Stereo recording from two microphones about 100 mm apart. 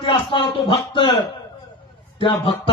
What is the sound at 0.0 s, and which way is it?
Speech, 55° left (ahead or behind).